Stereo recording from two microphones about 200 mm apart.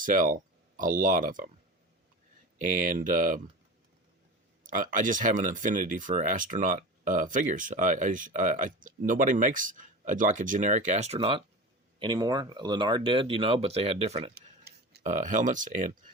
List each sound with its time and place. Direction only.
0.0 s speech: 40° right (ahead or behind)
2.6 s speech: 40° right (ahead or behind)
4.6 s speech: 40° right (ahead or behind)
14.3 s a sound: 50° right (ahead or behind)
15.0 s speech: 40° right (ahead or behind)